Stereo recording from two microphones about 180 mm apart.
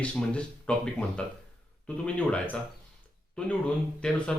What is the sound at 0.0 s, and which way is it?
Speech, 5° left (ahead or behind).